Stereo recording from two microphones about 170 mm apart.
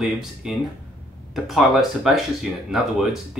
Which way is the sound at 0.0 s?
Centre (ahead or behind).